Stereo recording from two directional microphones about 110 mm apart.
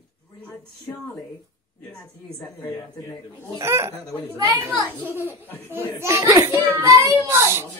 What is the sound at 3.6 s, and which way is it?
Speech, 25° right (ahead or behind).